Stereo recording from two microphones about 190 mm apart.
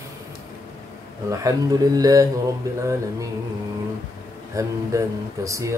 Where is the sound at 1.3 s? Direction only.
15° right (ahead or behind).